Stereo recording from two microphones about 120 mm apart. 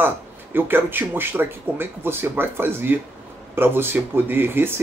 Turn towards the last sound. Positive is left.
turn(degrees=-20)  # may be behind; listen again after turning